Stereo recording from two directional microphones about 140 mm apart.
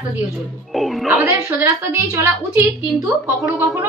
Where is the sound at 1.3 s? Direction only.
20° right (ahead or behind).